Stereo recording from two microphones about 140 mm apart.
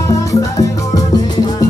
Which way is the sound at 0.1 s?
25° left (ahead or behind).